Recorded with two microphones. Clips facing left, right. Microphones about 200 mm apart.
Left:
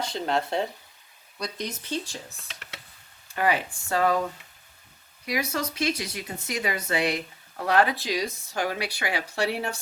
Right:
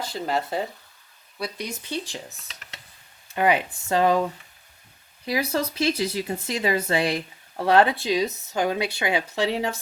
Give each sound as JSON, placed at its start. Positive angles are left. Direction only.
{"t": 0.0, "sound": "speech", "side_deg": -5}
{"t": 3.2, "sound": "speech", "side_deg": -20}
{"t": 5.2, "sound": "speech", "side_deg": -30}
{"t": 9.4, "sound": "speech", "side_deg": -90}